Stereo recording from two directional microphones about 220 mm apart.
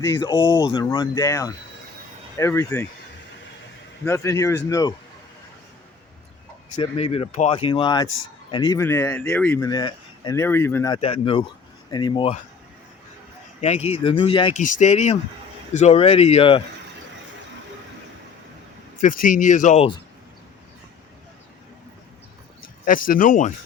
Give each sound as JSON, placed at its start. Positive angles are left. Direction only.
{"t": 0.1, "sound": "speech", "side_deg": 20}
{"t": 4.0, "sound": "speech", "side_deg": 10}
{"t": 6.7, "sound": "speech", "side_deg": 25}
{"t": 8.0, "sound": "speech", "side_deg": 65}
{"t": 8.4, "sound": "speech", "side_deg": 20}
{"t": 10.9, "sound": "speech", "side_deg": 25}
{"t": 13.6, "sound": "speech", "side_deg": 30}
{"t": 14.6, "sound": "speech", "side_deg": 35}
{"t": 19.0, "sound": "speech", "side_deg": 35}
{"t": 22.9, "sound": "speech", "side_deg": 40}